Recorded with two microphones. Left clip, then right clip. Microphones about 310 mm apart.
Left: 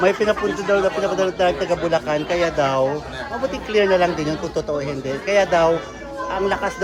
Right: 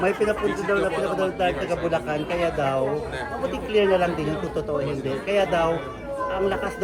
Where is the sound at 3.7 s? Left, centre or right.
Left.